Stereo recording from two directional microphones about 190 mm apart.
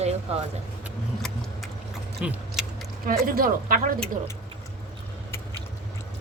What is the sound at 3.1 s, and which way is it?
Speech, 50° right (ahead or behind).